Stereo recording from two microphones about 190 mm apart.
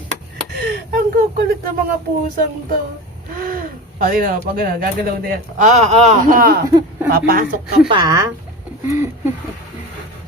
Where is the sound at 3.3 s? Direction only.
50° right (ahead or behind).